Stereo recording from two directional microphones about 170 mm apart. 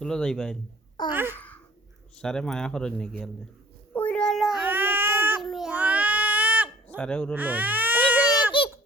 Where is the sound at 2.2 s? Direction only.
5° left (ahead or behind).